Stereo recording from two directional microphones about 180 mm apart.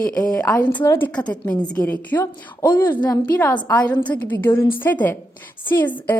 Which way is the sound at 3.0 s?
25° left (ahead or behind).